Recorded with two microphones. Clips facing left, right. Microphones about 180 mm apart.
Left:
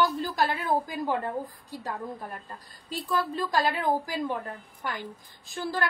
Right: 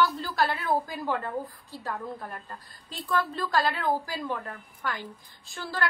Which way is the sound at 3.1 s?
15° left (ahead or behind).